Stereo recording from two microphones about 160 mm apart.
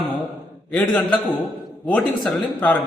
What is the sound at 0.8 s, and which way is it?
A man's voice, 5° left (ahead or behind).